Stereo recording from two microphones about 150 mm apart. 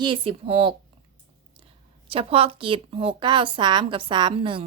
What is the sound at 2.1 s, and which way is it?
A woman's voice, 40° right (ahead or behind).